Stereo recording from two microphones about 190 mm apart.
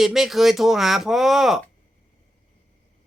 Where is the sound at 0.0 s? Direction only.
Centre (ahead or behind).